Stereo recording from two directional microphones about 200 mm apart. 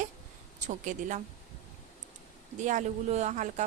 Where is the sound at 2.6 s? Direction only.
35° right (ahead or behind).